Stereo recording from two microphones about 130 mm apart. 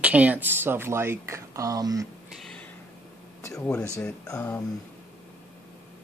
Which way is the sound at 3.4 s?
20° left (ahead or behind).